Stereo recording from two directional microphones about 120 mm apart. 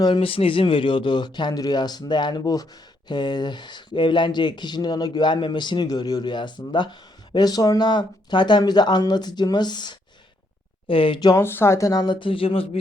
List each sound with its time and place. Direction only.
0.0 s speech: 45° left (ahead or behind)
11.3 s speech: 20° left (ahead or behind); by 12.6 s 50° left (ahead or behind)